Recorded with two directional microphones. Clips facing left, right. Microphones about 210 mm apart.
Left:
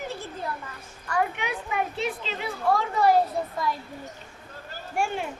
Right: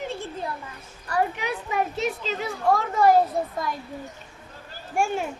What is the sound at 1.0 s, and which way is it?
A child's voice, 35° right (ahead or behind).